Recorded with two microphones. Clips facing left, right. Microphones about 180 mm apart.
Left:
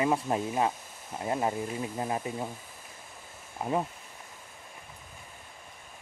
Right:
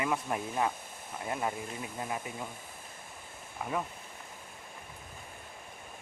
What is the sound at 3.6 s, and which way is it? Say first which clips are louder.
Speech: left 5 dB; 30° left (ahead or behind).